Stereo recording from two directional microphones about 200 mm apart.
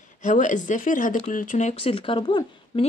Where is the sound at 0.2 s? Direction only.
40° left (ahead or behind).